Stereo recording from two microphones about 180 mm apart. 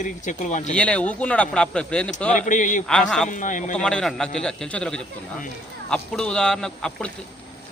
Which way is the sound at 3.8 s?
5° left (ahead or behind).